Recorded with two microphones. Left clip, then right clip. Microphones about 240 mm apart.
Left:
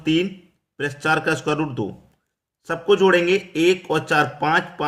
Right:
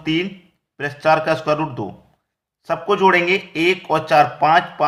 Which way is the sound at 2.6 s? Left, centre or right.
Left.